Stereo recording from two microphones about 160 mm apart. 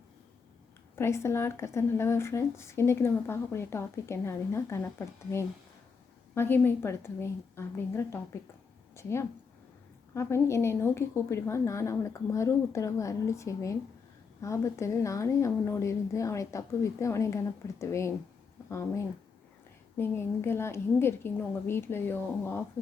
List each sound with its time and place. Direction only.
0.9 s a woman's voice: 15° left (ahead or behind)